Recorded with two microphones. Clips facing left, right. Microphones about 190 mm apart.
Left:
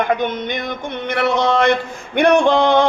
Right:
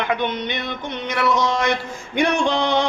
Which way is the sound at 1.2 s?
60° left (ahead or behind).